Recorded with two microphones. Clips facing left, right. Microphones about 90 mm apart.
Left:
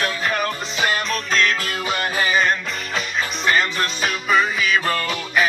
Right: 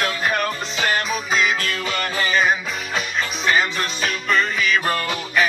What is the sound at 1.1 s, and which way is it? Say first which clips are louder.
Music: even; 5° right (ahead or behind).